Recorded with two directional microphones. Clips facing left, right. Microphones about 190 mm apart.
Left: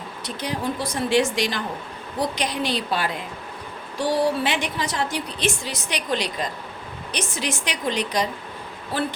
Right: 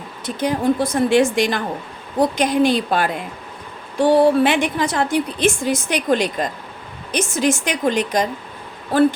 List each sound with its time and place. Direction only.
0.3 s a woman's voice: 50° right (ahead or behind)